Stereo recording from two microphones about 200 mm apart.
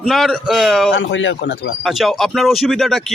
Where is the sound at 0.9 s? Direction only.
70° left (ahead or behind).